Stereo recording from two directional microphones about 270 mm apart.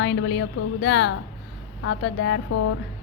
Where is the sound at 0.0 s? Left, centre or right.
Left.